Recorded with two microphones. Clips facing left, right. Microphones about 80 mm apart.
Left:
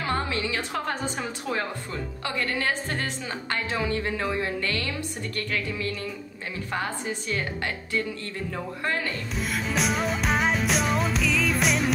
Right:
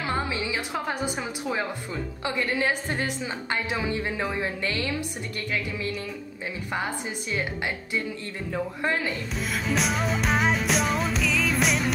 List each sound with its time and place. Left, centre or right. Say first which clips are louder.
0.0 s a woman's voice: left 1 dB; centre
9.5 s music: even; centre